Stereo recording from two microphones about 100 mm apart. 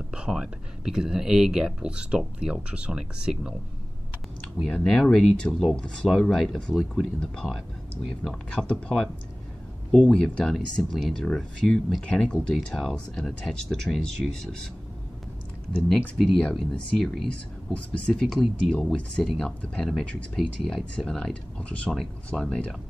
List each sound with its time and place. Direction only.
0.1 s speech: 10° right (ahead or behind)
4.6 s speech: 10° left (ahead or behind)
10.1 s speech: 10° left (ahead or behind)
16.2 s speech: 5° left (ahead or behind)
18.2 s speech: centre (ahead or behind)